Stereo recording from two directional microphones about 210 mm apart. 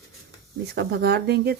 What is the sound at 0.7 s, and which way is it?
Speech, 50° right (ahead or behind).